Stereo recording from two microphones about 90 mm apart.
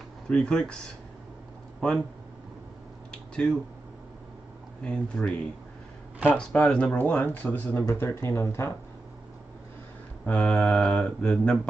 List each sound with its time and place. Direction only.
0.3 s speech: 10° left (ahead or behind)
3.1 s a sound: 10° left (ahead or behind)
4.8 s speech: 10° left (ahead or behind)
6.3 s speech: 10° left (ahead or behind); by 8.7 s 30° left (ahead or behind)
10.2 s speech: 15° left (ahead or behind)